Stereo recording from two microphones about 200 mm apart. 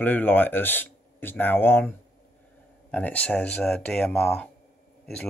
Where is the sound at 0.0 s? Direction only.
10° left (ahead or behind).